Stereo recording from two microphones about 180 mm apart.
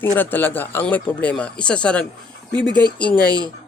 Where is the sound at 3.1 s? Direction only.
20° right (ahead or behind).